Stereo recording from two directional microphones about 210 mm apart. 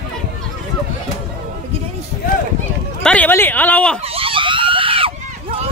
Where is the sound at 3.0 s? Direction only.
5° left (ahead or behind).